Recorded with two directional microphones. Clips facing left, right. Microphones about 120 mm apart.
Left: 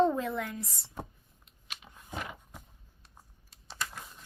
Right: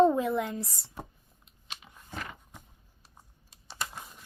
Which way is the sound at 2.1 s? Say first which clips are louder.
Left 1 dB; 5° left (ahead or behind).